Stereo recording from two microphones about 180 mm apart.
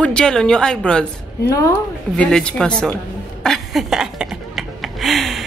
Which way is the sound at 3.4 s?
Centre (ahead or behind).